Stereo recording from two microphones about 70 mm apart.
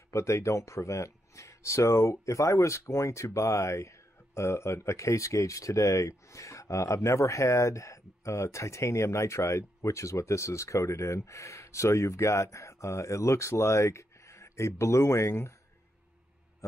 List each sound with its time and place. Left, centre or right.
0.1 s speech: left